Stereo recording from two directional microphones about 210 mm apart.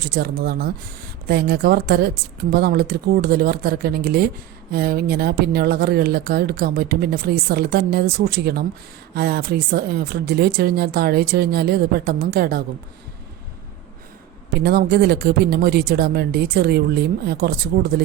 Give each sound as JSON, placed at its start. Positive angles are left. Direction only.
{"t": 0.0, "sound": "speech", "side_deg": -45}
{"t": 14.5, "sound": "speech", "side_deg": -50}